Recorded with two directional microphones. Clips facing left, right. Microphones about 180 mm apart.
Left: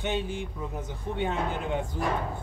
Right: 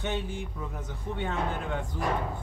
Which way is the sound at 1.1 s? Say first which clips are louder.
Left 2 dB; 15° left (ahead or behind).